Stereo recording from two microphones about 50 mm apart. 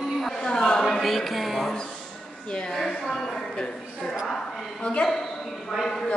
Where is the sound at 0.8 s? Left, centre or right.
Centre.